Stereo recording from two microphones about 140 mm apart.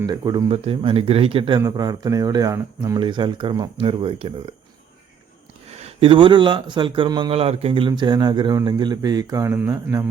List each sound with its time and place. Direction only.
0.0 s speech: 25° right (ahead or behind)
0.4 s a man's voice: 45° right (ahead or behind)
1.6 s speech: 25° right (ahead or behind)
5.7 s a man's voice: 45° right (ahead or behind); by 10.1 s 20° right (ahead or behind)